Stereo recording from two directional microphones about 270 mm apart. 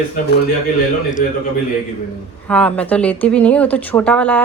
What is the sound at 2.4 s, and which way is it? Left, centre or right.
Speech, centre.